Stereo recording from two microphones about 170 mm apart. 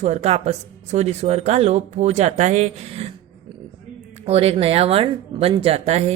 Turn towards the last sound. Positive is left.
turn(degrees=-40)  # may be behind; listen again after turning